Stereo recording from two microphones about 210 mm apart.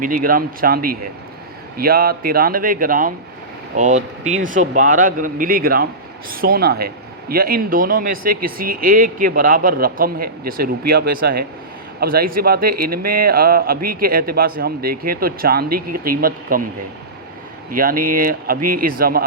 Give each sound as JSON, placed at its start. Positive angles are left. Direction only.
{"t": 0.0, "sound": "speech", "side_deg": -40}
{"t": 17.7, "sound": "speech", "side_deg": -40}